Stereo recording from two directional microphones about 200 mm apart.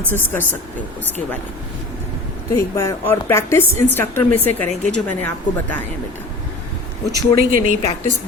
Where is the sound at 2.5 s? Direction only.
15° left (ahead or behind).